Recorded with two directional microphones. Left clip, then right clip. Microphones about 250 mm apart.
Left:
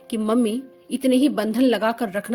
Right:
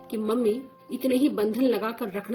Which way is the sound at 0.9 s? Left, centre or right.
Left.